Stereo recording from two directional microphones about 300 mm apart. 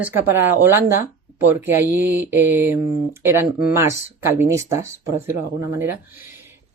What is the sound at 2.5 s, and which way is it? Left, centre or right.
Speech, centre.